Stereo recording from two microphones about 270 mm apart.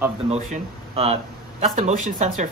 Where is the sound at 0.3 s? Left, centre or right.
Right.